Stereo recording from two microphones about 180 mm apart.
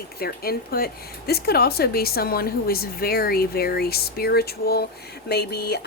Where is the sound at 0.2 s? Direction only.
55° left (ahead or behind).